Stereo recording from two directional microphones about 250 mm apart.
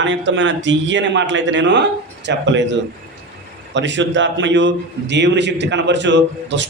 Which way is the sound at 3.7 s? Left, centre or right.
Right.